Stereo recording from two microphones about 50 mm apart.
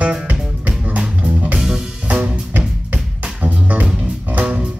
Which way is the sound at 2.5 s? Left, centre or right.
Right.